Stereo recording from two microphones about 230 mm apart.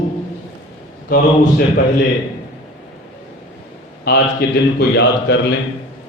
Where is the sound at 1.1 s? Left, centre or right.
Left.